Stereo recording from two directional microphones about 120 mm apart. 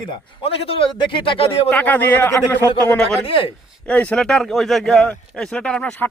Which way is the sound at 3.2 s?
50° left (ahead or behind).